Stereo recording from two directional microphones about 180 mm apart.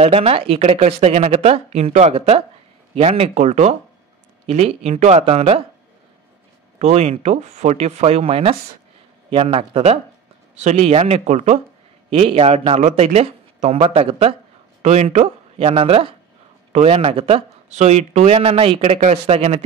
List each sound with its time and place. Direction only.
0.0 s speech: 35° right (ahead or behind)
6.8 s speech: 35° right (ahead or behind)